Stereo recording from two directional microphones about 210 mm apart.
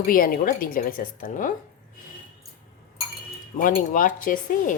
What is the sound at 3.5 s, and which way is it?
Speech, 40° left (ahead or behind).